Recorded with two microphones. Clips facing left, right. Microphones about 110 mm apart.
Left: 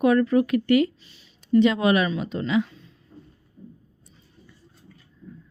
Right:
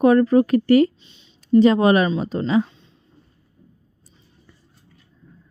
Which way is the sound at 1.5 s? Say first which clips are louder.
Right 5 dB; 35° right (ahead or behind).